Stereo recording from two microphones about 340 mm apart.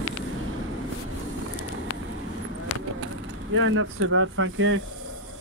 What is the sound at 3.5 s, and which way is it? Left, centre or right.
Speech, right.